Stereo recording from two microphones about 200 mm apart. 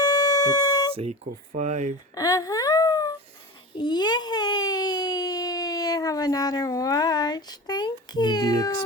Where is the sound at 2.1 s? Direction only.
15° left (ahead or behind).